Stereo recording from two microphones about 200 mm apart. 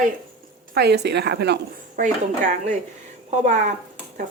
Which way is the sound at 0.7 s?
55° right (ahead or behind).